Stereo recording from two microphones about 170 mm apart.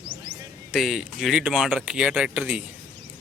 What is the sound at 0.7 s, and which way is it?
Speech, centre (ahead or behind).